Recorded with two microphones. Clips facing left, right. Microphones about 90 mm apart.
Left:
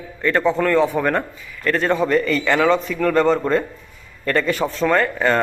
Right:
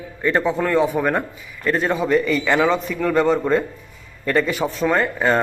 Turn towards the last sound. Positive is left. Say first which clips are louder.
# left 1 dB
turn(degrees=-10)  # may be behind; listen again after turning